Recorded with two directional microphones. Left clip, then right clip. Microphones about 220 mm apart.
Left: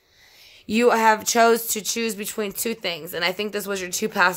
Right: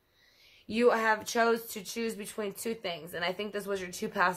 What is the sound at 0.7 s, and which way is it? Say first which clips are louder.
Speech: left 9 dB; 50° left (ahead or behind).